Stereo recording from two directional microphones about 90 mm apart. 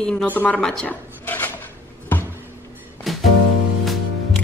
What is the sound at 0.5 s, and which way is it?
Speech, 5° left (ahead or behind).